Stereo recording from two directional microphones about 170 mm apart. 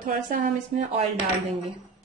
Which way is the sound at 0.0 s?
50° right (ahead or behind).